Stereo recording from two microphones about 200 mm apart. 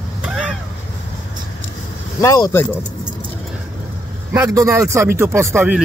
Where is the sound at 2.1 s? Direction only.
15° left (ahead or behind).